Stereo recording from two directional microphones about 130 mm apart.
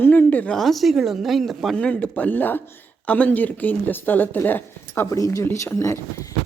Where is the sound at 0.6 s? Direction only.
Centre (ahead or behind).